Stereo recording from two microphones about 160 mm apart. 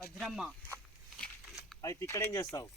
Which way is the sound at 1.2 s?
Centre (ahead or behind).